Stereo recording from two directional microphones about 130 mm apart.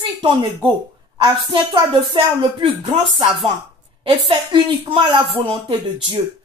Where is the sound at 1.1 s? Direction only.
35° right (ahead or behind).